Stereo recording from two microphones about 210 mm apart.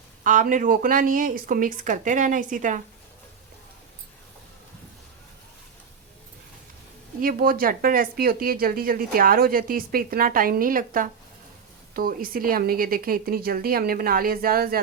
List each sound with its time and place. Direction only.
0.3 s speech: 40° right (ahead or behind)
7.2 s speech: 40° right (ahead or behind)